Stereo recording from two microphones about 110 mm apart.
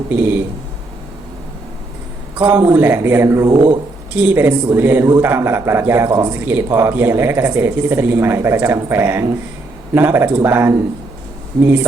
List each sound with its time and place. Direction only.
0.1 s speech: 15° right (ahead or behind)
2.4 s speech: 20° right (ahead or behind)
3.5 s speech: 40° right (ahead or behind)
4.1 s speech: 15° right (ahead or behind)